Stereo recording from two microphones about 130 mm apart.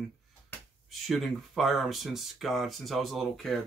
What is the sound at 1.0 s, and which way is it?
Speech, centre (ahead or behind).